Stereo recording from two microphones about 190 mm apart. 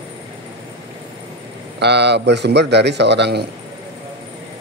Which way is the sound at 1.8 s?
60° right (ahead or behind).